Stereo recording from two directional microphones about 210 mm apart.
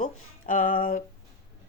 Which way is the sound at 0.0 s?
40° left (ahead or behind).